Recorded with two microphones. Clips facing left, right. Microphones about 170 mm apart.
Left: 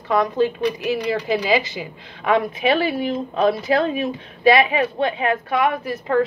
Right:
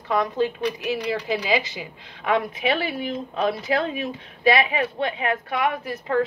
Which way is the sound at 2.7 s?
30° left (ahead or behind).